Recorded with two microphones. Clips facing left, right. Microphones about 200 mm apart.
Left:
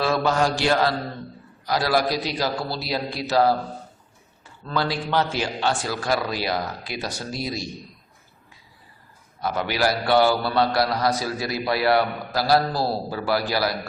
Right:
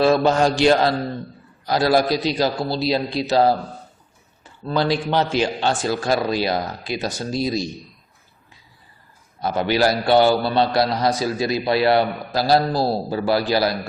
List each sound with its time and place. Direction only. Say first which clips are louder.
0.0 s a man's voice: right 5 dB; 25° right (ahead or behind)
4.6 s a man's voice: right 5 dB; 20° right (ahead or behind)
9.4 s a man's voice: right 5 dB; 25° right (ahead or behind)